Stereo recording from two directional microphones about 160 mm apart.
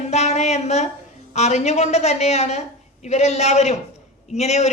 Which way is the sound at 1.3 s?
45° left (ahead or behind).